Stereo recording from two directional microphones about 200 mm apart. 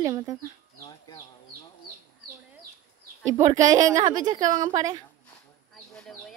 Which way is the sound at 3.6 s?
20° right (ahead or behind).